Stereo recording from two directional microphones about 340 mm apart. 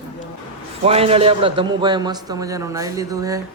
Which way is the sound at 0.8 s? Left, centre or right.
Centre.